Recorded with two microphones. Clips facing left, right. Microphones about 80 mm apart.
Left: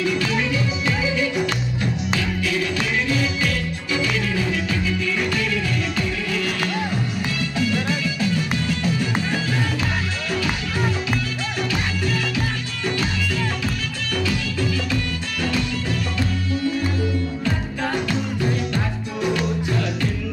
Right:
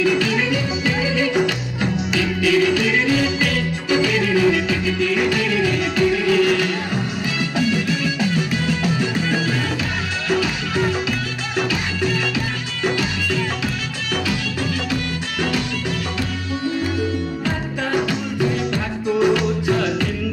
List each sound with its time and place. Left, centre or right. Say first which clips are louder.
0.0 s music: right 4 dB; right
4.2 s music: right 7 dB; right
7.3 s music: right 4 dB; right
19.2 s music: right 3 dB; right